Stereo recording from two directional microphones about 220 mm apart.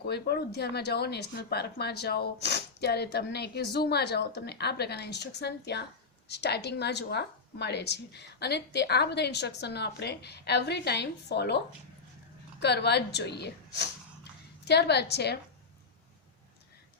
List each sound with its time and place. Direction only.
0.0 s speech: 45° left (ahead or behind)